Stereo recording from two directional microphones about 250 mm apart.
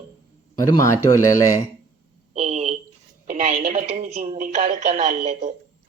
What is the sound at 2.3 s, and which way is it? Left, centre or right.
Speech, right.